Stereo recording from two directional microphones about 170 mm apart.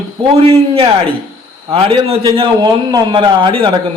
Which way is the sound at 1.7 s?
30° right (ahead or behind).